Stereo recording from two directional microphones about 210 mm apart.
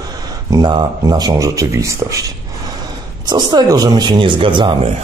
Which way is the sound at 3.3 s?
20° right (ahead or behind).